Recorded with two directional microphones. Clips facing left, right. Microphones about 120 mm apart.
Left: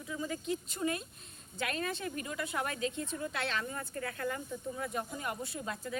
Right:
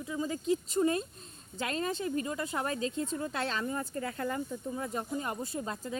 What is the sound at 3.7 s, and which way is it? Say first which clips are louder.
Speech: right 4 dB; 20° right (ahead or behind).